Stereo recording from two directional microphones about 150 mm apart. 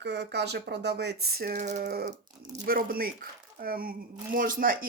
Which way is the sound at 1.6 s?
55° right (ahead or behind).